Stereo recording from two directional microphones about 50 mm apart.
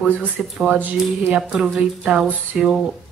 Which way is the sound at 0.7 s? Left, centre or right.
Right.